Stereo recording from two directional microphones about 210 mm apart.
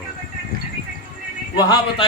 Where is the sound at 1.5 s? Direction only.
20° left (ahead or behind).